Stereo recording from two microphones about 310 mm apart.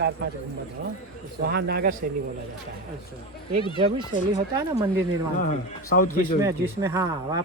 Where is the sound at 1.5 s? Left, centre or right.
Right.